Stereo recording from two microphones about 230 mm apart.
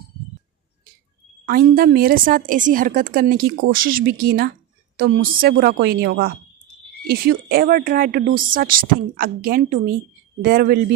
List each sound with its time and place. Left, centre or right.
1.5 s a woman's voice: right